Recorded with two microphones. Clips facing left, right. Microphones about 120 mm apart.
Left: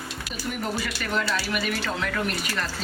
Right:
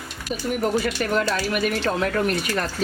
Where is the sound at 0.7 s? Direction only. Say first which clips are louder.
Right 6 dB; 45° right (ahead or behind).